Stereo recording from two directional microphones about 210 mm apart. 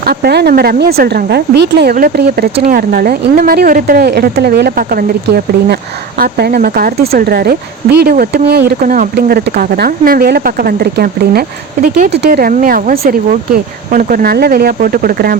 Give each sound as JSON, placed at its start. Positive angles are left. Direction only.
{"t": 0.0, "sound": "speech", "side_deg": -50}